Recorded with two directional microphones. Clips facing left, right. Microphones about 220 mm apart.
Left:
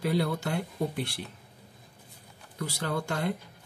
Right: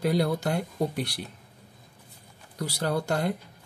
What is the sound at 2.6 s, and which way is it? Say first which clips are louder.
Speech: right 4 dB; 40° right (ahead or behind).